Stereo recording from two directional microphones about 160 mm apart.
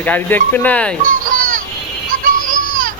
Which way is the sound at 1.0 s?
55° right (ahead or behind).